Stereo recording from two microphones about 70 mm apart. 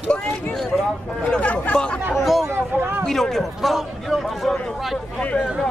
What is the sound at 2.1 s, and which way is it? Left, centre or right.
A man's voice, centre.